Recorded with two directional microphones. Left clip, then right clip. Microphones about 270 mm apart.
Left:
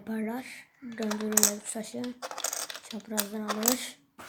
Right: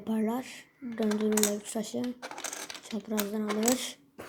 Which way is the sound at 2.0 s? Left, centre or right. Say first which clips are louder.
Left 1 dB; centre.